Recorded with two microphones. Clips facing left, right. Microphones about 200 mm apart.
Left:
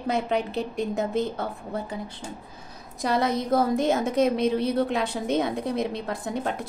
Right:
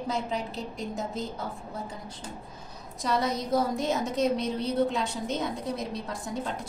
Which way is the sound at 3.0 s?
60° left (ahead or behind).